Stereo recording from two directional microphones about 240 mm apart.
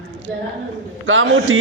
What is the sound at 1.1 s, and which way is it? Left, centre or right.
Speech, right.